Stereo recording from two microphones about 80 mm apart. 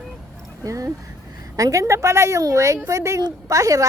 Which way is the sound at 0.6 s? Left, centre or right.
Right.